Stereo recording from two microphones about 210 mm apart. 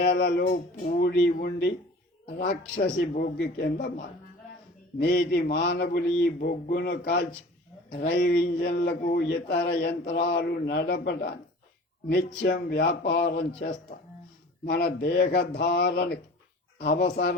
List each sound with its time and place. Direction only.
0.0 s speech: 50° left (ahead or behind)
3.2 s speech: 45° left (ahead or behind)